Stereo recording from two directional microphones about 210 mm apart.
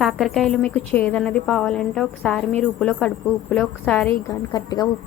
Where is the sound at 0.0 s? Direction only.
Centre (ahead or behind).